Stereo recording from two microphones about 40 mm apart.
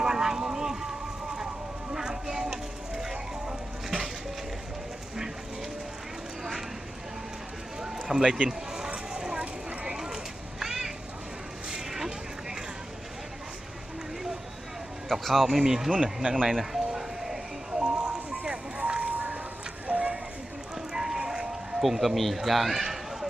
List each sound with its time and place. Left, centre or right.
0.0 s vehicle: centre
2.0 s a sound: centre
8.0 s speech: centre
8.4 s a sound: centre
15.1 s speech: centre
15.5 s speech: centre
16.2 s speech: right
16.7 s vehicle: centre
17.7 s music: right
18.8 s run: right
19.9 s a sound: right
20.9 s music: centre
22.4 s speech: centre
22.8 s run: centre